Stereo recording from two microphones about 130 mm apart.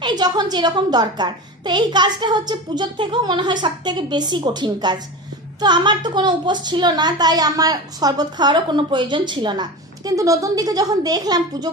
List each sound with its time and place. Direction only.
0.0 s a woman's voice: 35° right (ahead or behind)